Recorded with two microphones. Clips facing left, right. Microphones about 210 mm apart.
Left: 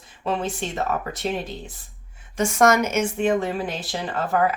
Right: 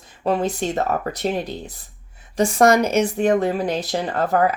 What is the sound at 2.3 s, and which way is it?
Speech, 35° right (ahead or behind).